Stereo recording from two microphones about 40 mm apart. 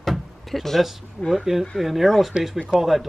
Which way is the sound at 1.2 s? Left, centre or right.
Right.